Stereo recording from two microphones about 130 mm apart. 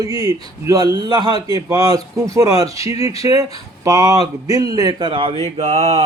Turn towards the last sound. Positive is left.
turn(degrees=-55)  # may be behind; listen again after turning